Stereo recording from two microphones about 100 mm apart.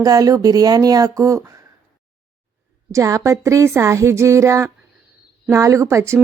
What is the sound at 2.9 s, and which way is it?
A woman's voice, 35° right (ahead or behind).